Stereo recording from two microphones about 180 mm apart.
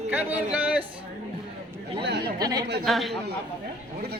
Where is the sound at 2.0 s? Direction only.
70° right (ahead or behind).